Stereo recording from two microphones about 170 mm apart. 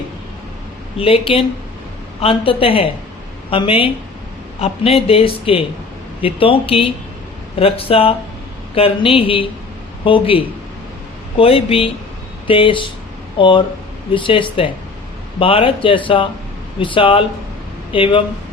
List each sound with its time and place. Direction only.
0.9 s speech: 35° left (ahead or behind)